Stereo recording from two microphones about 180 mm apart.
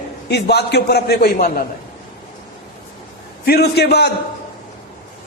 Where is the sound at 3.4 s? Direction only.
60° left (ahead or behind).